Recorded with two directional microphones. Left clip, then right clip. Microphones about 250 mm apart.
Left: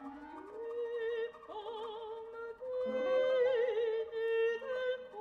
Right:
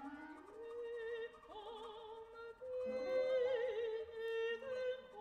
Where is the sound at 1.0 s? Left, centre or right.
Left.